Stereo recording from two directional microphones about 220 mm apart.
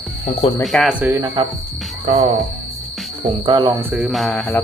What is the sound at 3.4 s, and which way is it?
Speech, 25° right (ahead or behind).